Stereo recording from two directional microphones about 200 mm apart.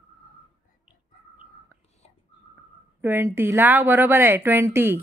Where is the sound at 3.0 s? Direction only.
10° right (ahead or behind).